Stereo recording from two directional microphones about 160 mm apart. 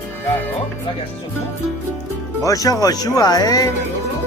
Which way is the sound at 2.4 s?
20° left (ahead or behind).